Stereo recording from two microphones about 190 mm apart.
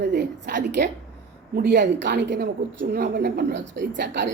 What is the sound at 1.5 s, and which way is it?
A woman's voice, 55° right (ahead or behind).